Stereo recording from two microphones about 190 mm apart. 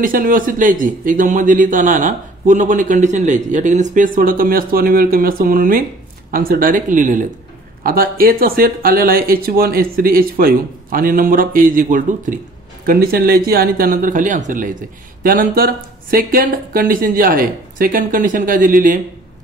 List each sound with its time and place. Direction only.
0.0 s speech: 45° right (ahead or behind)